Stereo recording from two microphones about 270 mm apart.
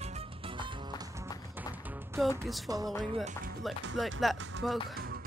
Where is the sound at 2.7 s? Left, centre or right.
Centre.